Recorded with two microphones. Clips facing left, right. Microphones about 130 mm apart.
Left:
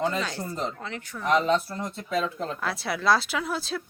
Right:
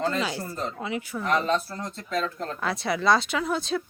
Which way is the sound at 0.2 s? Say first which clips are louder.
Right 1 dB; 10° right (ahead or behind).